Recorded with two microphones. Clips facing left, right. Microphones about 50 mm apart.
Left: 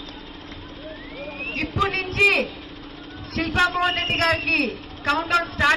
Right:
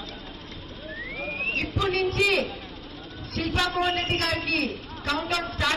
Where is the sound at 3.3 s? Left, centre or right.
Left.